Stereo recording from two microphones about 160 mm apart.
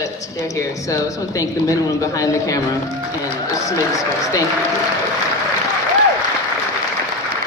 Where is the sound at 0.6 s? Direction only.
20° left (ahead or behind).